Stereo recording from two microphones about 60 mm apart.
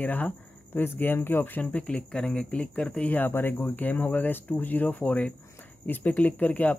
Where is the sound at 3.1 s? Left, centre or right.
Left.